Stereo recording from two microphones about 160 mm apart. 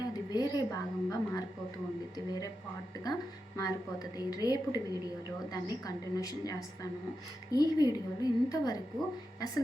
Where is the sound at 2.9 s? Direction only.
25° left (ahead or behind).